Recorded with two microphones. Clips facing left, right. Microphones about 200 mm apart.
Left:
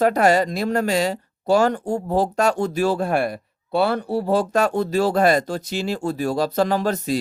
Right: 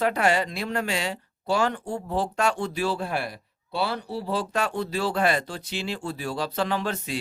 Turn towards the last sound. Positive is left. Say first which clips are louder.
# left 7 dB
turn(degrees=40)  # may be behind; listen again after turning